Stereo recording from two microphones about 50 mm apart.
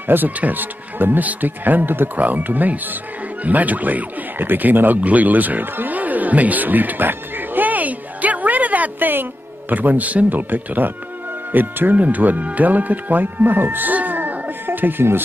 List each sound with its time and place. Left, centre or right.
0.0 s speech: right